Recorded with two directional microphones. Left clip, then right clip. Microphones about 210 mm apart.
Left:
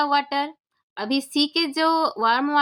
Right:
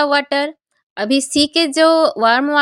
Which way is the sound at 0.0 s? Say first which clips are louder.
Right 6 dB; 30° right (ahead or behind).